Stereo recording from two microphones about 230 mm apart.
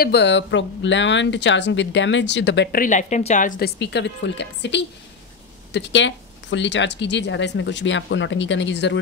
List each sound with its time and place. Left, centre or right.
0.0 s speech: left